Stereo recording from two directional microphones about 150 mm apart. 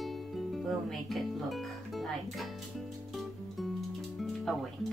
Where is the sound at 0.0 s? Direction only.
Centre (ahead or behind).